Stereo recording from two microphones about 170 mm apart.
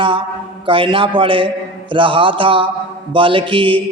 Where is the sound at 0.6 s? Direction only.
30° right (ahead or behind).